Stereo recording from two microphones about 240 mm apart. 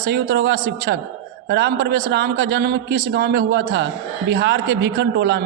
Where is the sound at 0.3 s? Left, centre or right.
Right.